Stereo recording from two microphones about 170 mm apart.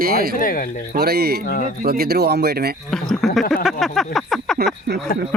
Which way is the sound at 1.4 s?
60° left (ahead or behind).